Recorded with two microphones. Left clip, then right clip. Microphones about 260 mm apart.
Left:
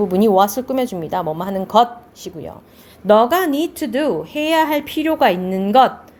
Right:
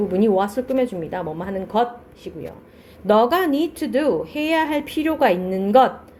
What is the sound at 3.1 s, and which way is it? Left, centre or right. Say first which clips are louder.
A woman's voice: left 3 dB; left.